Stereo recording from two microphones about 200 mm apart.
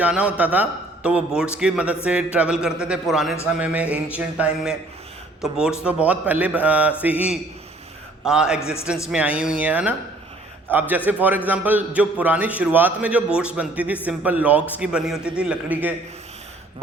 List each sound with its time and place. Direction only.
0.0 s a man's voice: 5° right (ahead or behind)